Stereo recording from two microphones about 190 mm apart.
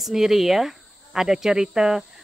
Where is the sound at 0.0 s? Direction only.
Centre (ahead or behind).